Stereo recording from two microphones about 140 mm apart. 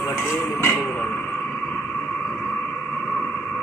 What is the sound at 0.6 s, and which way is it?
Music, 10° left (ahead or behind).